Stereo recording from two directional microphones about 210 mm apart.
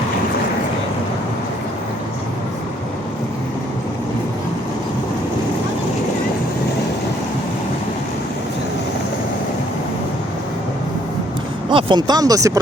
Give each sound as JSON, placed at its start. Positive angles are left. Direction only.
{"t": 11.7, "sound": "speech", "side_deg": -25}